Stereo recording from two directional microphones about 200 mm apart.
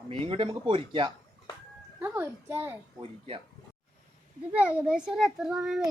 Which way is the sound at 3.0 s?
25° right (ahead or behind).